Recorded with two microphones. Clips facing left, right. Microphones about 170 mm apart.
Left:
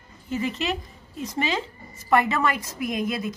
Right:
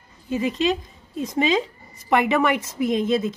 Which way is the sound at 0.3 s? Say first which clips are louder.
Right 5 dB; 15° right (ahead or behind).